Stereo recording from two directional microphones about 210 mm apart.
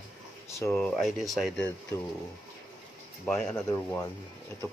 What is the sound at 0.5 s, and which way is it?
Speech, 15° left (ahead or behind).